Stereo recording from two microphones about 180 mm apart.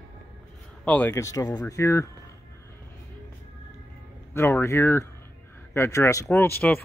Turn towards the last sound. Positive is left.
turn(degrees=10)  # may be behind; listen again after turning